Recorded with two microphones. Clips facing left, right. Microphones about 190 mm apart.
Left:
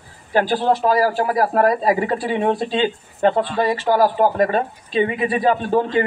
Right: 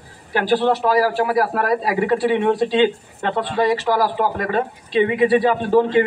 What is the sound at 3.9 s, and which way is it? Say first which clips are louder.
A man's voice: left 3 dB; 40° left (ahead or behind).